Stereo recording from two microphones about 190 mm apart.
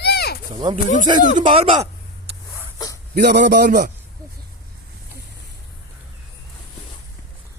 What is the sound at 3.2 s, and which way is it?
Speech, 65° right (ahead or behind).